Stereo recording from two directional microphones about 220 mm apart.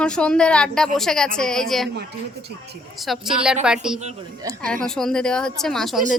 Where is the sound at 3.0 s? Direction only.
Centre (ahead or behind).